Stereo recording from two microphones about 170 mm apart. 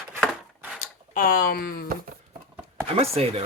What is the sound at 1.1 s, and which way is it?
Speech, 55° left (ahead or behind).